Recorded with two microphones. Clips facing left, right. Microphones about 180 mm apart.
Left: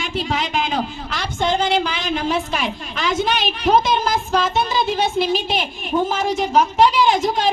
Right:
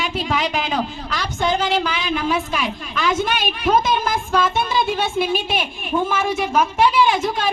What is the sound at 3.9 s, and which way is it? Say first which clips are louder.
Child singing: left 1 dB; 40° left (ahead or behind).